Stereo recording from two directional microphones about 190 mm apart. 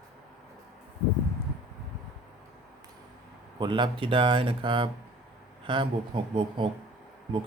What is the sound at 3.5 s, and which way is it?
Speech, 25° right (ahead or behind).